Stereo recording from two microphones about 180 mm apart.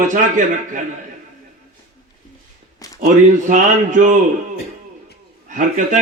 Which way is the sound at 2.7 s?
20° left (ahead or behind).